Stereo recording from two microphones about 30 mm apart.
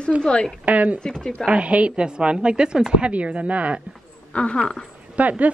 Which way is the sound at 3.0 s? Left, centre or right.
Right.